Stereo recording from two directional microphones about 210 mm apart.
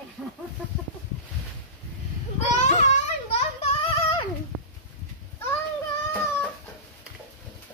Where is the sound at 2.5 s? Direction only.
35° left (ahead or behind).